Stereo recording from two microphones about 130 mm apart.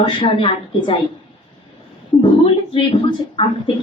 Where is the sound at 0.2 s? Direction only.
40° left (ahead or behind).